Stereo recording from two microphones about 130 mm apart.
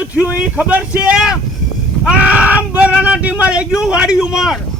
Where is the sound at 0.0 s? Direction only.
10° right (ahead or behind).